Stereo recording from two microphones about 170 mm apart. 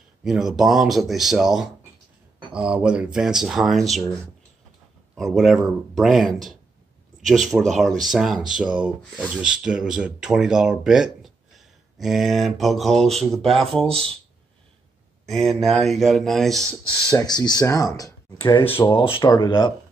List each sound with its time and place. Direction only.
0.2 s speech: centre (ahead or behind)
5.1 s speech: centre (ahead or behind)
15.2 s speech: centre (ahead or behind)
17.1 s speech: 25° left (ahead or behind)